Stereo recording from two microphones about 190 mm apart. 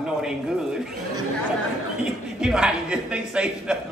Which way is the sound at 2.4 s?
5° right (ahead or behind).